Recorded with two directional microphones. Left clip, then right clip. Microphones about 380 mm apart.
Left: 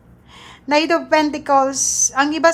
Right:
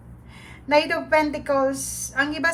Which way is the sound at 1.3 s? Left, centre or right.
Centre.